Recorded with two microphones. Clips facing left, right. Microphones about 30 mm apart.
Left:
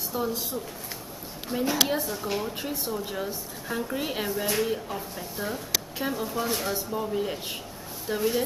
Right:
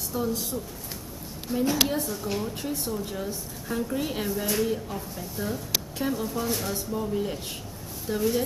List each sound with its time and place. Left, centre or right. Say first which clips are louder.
0.1 s speech: right 1 dB; centre
1.6 s speech: even; centre